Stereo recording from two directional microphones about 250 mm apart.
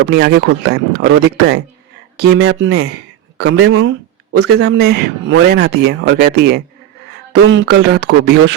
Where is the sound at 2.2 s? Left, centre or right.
Right.